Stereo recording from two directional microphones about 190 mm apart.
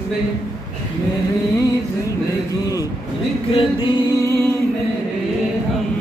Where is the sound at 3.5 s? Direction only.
25° left (ahead or behind).